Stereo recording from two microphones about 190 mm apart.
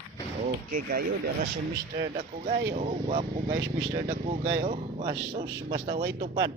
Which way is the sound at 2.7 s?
40° right (ahead or behind).